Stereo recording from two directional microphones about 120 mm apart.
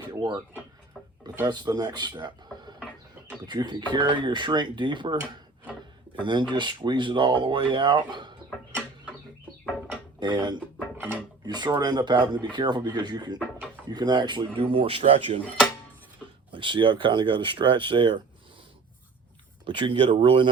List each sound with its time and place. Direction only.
0.0 s a sound: 35° right (ahead or behind)
0.9 s a sound: 5° left (ahead or behind)
1.5 s speech: 35° right (ahead or behind)
6.1 s speech: 40° right (ahead or behind)
10.2 s speech: 35° right (ahead or behind)
16.5 s speech: 45° right (ahead or behind)
19.6 s speech: 40° right (ahead or behind)